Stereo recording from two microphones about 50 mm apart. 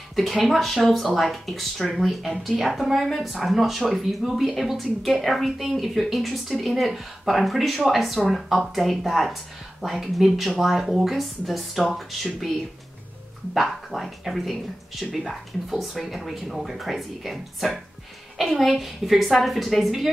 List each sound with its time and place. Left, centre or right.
0.1 s speech: centre
13.5 s speech: centre